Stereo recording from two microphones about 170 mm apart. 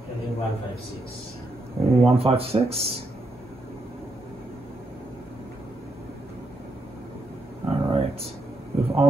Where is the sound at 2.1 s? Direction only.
35° right (ahead or behind).